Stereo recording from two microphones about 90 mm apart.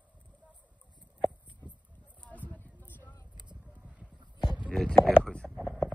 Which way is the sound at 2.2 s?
20° left (ahead or behind).